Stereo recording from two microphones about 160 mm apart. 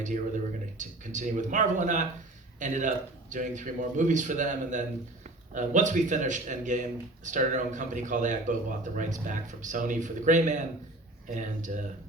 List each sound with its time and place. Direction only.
0.8 s speech: 50° right (ahead or behind)